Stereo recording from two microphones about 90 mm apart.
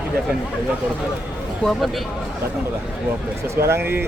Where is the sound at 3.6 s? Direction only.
25° right (ahead or behind).